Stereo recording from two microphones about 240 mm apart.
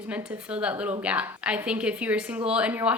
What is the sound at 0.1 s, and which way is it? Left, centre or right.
A woman's voice, centre.